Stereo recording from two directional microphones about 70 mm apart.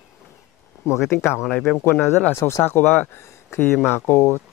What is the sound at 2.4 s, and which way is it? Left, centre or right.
Speech, left.